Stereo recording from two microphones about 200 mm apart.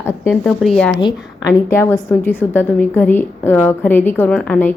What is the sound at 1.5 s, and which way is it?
A woman's voice, 10° left (ahead or behind).